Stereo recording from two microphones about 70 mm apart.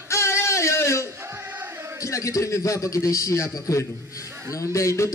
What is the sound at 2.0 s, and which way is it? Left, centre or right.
A man's voice, left.